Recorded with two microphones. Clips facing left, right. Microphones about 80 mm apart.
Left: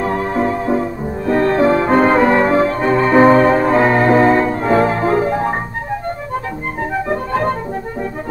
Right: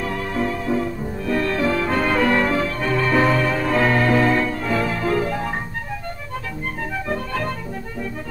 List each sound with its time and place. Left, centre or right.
0.0 s music: left
7.1 s music: left